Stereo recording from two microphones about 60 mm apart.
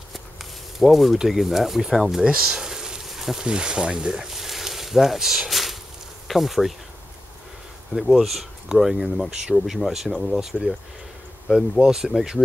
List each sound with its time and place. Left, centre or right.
0.1 s speech: centre
7.9 s speech: centre